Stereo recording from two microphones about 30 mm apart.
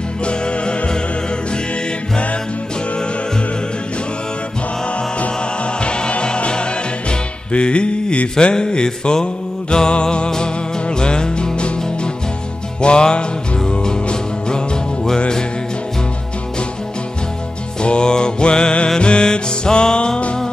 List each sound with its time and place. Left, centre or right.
0.2 s music: left
5.8 s music: left
8.5 s music: left
17.8 s music: left